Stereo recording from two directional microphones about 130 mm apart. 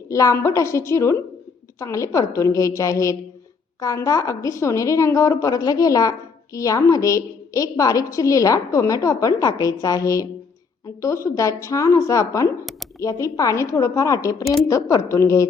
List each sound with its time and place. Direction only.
0.1 s a woman's voice: 25° left (ahead or behind)